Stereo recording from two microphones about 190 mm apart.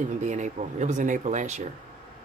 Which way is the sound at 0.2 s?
40° right (ahead or behind).